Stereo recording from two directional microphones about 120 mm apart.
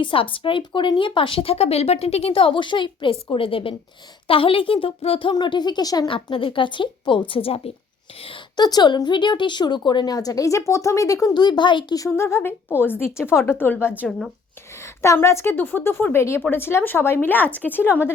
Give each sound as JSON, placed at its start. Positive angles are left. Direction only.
{"t": 0.0, "sound": "speech", "side_deg": 50}
{"t": 6.1, "sound": "speech", "side_deg": 45}
{"t": 8.5, "sound": "a woman's voice", "side_deg": 35}
{"t": 11.9, "sound": "a woman's voice", "side_deg": 25}
{"t": 15.0, "sound": "a woman's voice", "side_deg": 25}